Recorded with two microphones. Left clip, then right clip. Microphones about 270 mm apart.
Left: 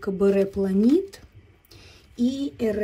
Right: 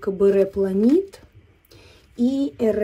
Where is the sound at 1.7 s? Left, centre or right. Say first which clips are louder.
Even; centre.